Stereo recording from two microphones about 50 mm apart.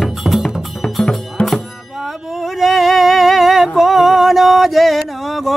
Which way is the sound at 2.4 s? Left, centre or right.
Centre.